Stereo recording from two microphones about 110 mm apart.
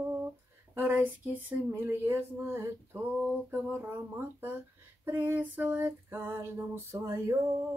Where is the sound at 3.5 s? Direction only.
20° right (ahead or behind).